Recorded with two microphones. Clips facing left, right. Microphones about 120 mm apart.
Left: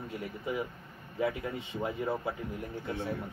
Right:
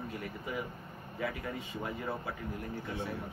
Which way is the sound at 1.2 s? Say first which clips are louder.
Left 5 dB; 20° left (ahead or behind).